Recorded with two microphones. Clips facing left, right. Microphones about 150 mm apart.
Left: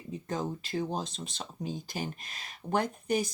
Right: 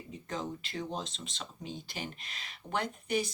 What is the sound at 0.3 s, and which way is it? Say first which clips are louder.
Speech: left 4 dB; 40° left (ahead or behind).